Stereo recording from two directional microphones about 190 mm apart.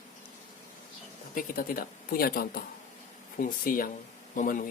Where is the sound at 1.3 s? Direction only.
45° left (ahead or behind).